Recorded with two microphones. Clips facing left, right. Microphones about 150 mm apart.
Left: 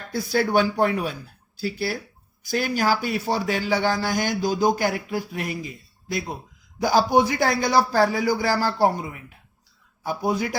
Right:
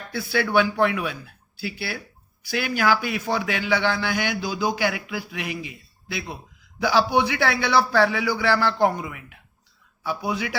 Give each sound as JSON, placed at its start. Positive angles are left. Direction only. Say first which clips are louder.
{"t": 0.1, "sound": "a man's voice", "louder": "left 1 dB", "side_deg": 40}
{"t": 2.4, "sound": "a man's voice", "louder": "left 1 dB", "side_deg": 45}
{"t": 10.0, "sound": "a man's voice", "louder": "left 3 dB", "side_deg": 45}